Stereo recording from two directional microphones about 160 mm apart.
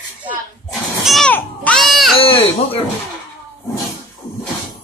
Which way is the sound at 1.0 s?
Centre (ahead or behind).